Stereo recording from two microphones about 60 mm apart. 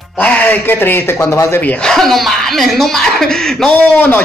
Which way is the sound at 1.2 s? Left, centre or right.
Left.